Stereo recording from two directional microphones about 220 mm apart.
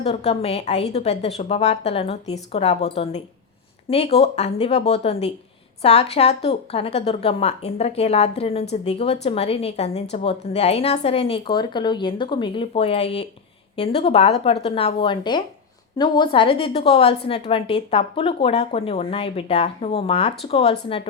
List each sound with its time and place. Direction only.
0.0 s a woman's voice: 30° left (ahead or behind)